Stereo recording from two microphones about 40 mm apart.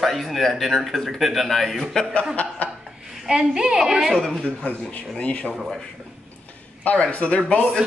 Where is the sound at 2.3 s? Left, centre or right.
Left.